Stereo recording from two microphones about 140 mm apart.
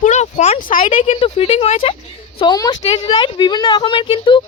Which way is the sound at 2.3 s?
30° left (ahead or behind).